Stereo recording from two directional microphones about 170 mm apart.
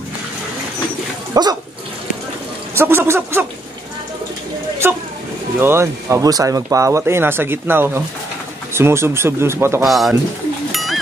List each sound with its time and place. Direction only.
1.3 s speech: 25° right (ahead or behind)
2.7 s speech: 15° right (ahead or behind)
5.6 s speech: 15° right (ahead or behind)
9.8 s speech: centre (ahead or behind)
10.7 s bird: centre (ahead or behind)